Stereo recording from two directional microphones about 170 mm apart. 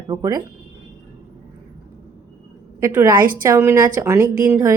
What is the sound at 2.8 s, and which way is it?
A woman's voice, 15° right (ahead or behind).